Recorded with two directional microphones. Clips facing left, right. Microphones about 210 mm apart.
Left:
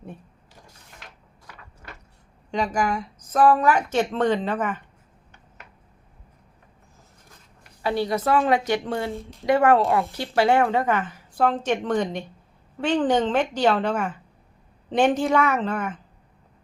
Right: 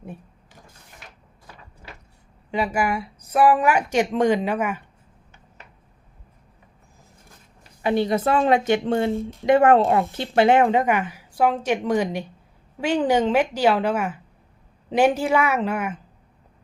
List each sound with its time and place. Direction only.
2.5 s speech: 5° right (ahead or behind)
7.8 s a woman's voice: 20° right (ahead or behind)